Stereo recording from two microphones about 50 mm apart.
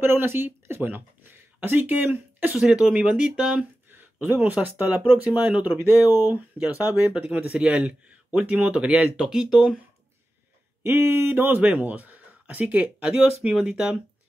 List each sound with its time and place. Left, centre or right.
0.0 s speech: right
2.5 s speech: centre
3.9 s a sound: right
4.6 s speech: right
9.1 s speech: centre
10.8 s speech: right
11.6 s speech: right
13.0 s speech: right